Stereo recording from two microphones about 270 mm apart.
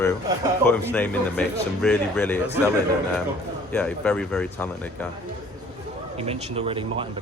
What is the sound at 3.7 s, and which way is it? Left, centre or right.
Speech, centre.